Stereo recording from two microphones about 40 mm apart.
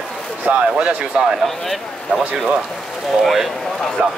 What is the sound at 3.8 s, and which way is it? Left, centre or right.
Speech, centre.